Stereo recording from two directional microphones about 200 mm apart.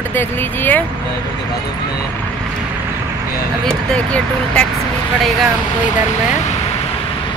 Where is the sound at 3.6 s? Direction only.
5° left (ahead or behind).